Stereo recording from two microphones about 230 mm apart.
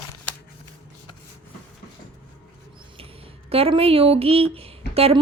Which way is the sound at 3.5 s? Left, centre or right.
Right.